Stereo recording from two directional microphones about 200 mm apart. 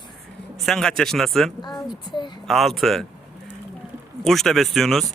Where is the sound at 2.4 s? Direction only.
Centre (ahead or behind).